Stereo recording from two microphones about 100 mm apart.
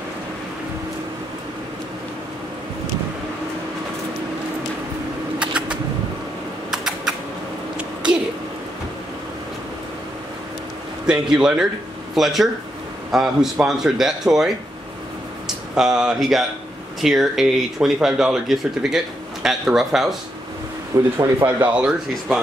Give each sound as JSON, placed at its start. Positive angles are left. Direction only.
{"t": 5.4, "sound": "a sound", "side_deg": -10}
{"t": 6.7, "sound": "typing", "side_deg": -5}
{"t": 7.7, "sound": "a sound", "side_deg": -10}
{"t": 11.1, "sound": "speech", "side_deg": -10}
{"t": 20.9, "sound": "speech", "side_deg": -30}
{"t": 21.7, "sound": "speech", "side_deg": -10}